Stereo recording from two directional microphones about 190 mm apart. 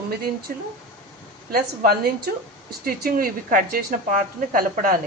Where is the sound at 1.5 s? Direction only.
50° right (ahead or behind).